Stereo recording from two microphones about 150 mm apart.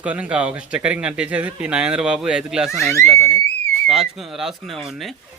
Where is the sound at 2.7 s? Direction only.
20° left (ahead or behind).